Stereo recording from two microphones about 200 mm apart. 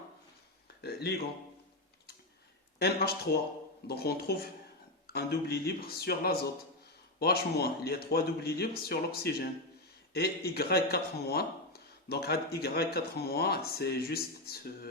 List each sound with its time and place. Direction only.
0.8 s speech: 50° left (ahead or behind)
2.7 s speech: 55° left (ahead or behind)